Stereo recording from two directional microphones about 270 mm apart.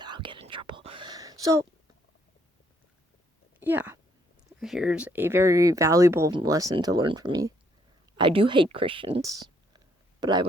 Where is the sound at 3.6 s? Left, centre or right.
Centre.